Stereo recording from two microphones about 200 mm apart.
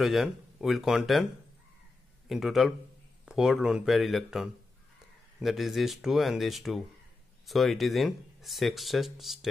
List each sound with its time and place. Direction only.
0.0 s speech: centre (ahead or behind)
2.2 s speech: centre (ahead or behind)